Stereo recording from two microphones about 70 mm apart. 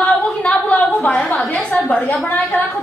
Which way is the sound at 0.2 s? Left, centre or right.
Centre.